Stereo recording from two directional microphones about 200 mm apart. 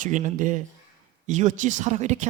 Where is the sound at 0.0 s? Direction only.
40° right (ahead or behind).